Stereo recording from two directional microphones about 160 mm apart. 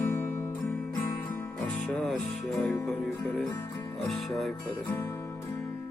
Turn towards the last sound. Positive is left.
turn(degrees=20)  # may be behind; listen again after turning